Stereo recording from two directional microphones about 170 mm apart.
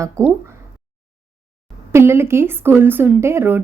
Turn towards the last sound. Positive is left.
turn(degrees=-15)  # may be behind; listen again after turning